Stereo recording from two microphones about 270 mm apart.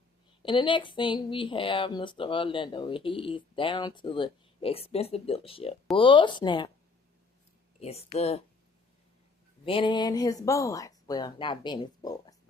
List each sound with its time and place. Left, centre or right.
0.4 s speech: centre
7.8 s speech: left
9.6 s speech: centre